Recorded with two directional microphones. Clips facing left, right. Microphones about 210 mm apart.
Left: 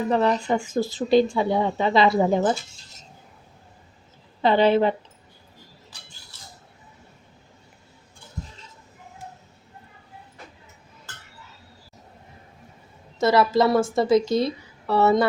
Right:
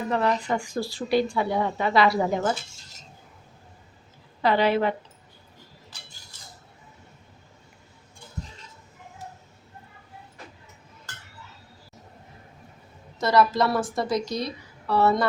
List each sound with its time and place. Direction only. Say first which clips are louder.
0.1 s speech: left 3 dB; 30° left (ahead or behind)
4.4 s speech: left 4 dB; 25° left (ahead or behind)
13.1 s speech: left 3 dB; 25° left (ahead or behind)